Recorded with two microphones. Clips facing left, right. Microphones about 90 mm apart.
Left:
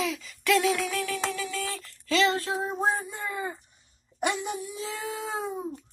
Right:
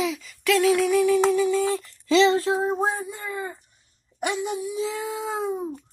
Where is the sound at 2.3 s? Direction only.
25° right (ahead or behind).